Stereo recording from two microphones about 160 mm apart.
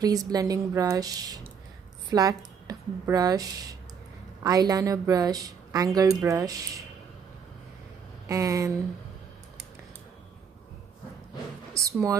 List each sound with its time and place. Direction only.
0.0 s a woman's voice: 25° right (ahead or behind)
8.3 s a woman's voice: 20° right (ahead or behind)
11.7 s a woman's voice: 20° right (ahead or behind)